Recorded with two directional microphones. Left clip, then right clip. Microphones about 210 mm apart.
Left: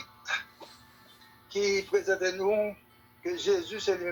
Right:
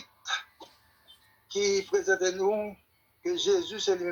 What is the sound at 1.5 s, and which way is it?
Speech, 55° right (ahead or behind).